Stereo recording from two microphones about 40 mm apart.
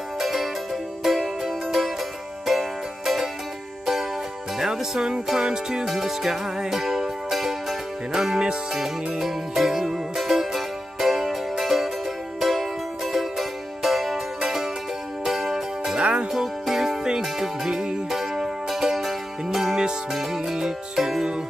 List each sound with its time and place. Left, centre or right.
0.2 s music: centre
4.6 s music: centre
20.5 s music: centre